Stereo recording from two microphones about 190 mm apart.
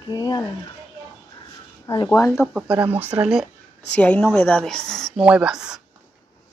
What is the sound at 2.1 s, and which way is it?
Speech, 15° left (ahead or behind).